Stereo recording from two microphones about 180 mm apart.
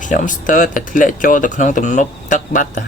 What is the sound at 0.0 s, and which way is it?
Speech, 45° left (ahead or behind).